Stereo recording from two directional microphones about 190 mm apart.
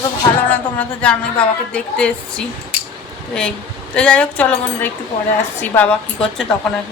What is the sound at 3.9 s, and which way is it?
Speech, 5° left (ahead or behind).